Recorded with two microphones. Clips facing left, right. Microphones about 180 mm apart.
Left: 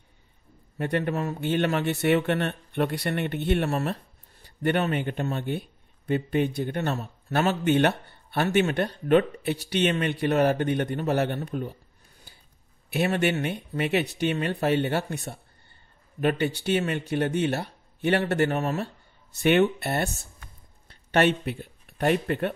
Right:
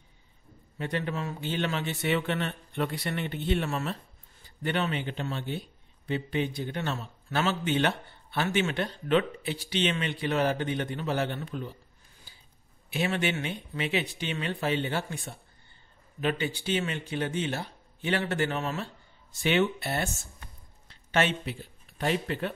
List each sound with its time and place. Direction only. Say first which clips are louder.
0.7 s a man's voice: left 5 dB; 55° left (ahead or behind)
12.9 s a man's voice: left 5 dB; 50° left (ahead or behind)
21.1 s speech: left 5 dB; 60° left (ahead or behind)